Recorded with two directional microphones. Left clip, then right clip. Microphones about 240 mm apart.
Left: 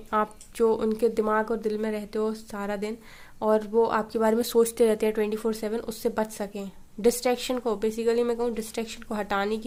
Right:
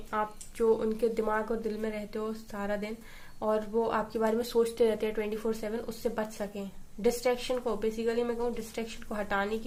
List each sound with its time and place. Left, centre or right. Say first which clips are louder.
0.1 s speech: left 6 dB; left